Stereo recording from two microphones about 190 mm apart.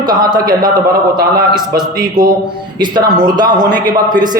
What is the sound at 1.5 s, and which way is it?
A man's voice, 20° right (ahead or behind).